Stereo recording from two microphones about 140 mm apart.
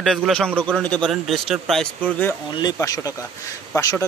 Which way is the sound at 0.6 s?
10° right (ahead or behind).